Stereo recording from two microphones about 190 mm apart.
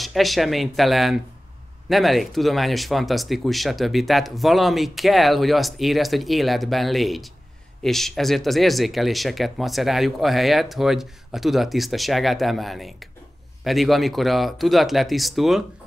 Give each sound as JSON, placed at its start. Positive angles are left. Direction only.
{"t": 0.0, "sound": "speech", "side_deg": 0}